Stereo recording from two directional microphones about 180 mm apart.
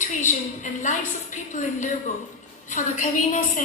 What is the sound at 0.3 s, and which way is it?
A woman's voice, 45° left (ahead or behind).